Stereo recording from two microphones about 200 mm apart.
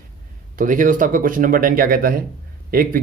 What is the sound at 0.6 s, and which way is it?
Speech, 40° right (ahead or behind).